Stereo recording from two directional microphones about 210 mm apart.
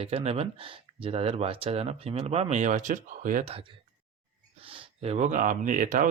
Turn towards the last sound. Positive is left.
turn(degrees=-40)  # may be behind; listen again after turning